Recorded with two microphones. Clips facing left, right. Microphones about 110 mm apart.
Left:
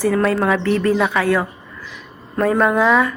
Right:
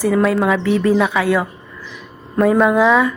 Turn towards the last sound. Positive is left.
turn(degrees=-5)  # may be behind; listen again after turning